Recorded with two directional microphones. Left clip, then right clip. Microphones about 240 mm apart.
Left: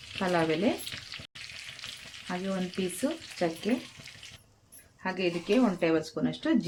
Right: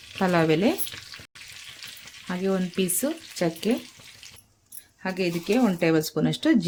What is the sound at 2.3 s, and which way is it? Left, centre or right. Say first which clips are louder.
Speech: right 7 dB; right.